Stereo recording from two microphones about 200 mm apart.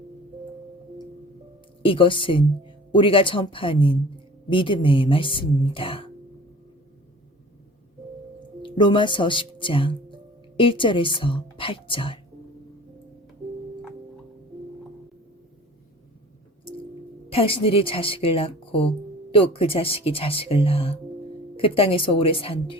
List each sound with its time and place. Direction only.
1.8 s speech: 25° left (ahead or behind)
8.6 s speech: 25° left (ahead or behind)
17.2 s speech: 25° left (ahead or behind)